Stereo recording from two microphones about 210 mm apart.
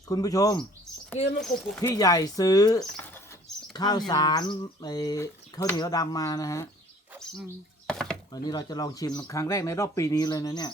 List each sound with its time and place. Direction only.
0.1 s speech: 15° left (ahead or behind)
1.4 s speech: 5° left (ahead or behind)
7.9 s chopping: 5° left (ahead or behind)
8.3 s speech: 20° left (ahead or behind)